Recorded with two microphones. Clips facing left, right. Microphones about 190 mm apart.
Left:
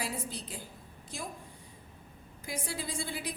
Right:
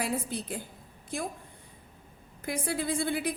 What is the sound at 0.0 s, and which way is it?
A woman's voice, 55° right (ahead or behind).